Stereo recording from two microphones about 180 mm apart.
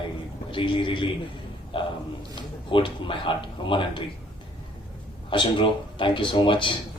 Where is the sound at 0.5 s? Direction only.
25° left (ahead or behind).